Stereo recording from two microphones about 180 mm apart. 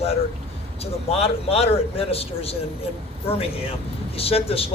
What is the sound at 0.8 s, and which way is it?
Speech, 35° left (ahead or behind).